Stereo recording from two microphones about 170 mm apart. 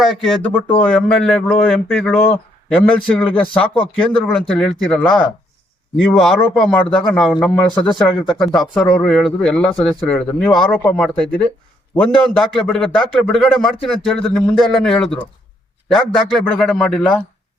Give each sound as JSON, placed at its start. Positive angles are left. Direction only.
{"t": 0.0, "sound": "speech", "side_deg": 5}
{"t": 7.8, "sound": "speech", "side_deg": 25}
{"t": 8.3, "sound": "speech", "side_deg": 0}